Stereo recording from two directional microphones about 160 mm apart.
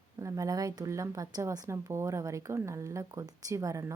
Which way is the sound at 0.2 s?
20° right (ahead or behind).